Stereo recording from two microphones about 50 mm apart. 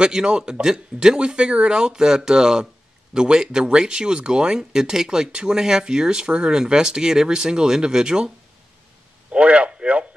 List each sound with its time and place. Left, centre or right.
0.0 s speech: centre
9.3 s speech: right